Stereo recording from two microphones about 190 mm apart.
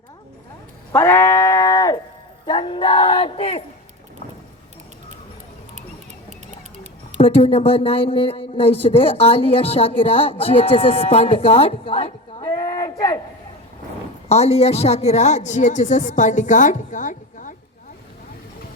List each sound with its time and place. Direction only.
0.9 s sheep: 15° left (ahead or behind)
2.5 s a sound: 25° left (ahead or behind)
7.2 s speech: 30° left (ahead or behind)
14.3 s a woman's voice: 35° left (ahead or behind)